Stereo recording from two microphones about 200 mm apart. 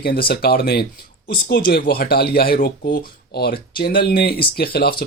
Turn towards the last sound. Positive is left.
turn(degrees=50)  # may be behind; listen again after turning